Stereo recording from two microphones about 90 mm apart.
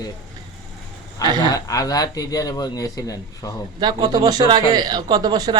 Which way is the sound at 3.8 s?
45° right (ahead or behind).